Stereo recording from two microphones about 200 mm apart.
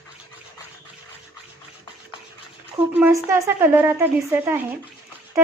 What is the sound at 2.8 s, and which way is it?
Speech, 5° right (ahead or behind).